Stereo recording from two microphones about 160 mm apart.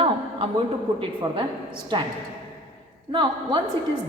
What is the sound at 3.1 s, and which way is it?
Speech, 30° right (ahead or behind).